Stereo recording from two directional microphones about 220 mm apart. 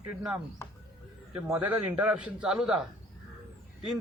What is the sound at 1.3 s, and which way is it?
A man's voice, 5° right (ahead or behind).